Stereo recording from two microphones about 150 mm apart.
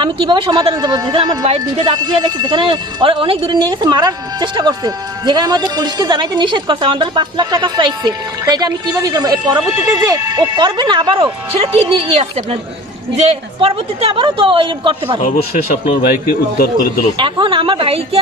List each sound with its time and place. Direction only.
0.0 s speech: 30° right (ahead or behind)
15.2 s speech: 60° left (ahead or behind)
17.2 s speech: 35° right (ahead or behind)